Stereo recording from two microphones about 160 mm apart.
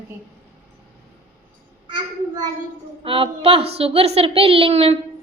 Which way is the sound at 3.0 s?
35° right (ahead or behind).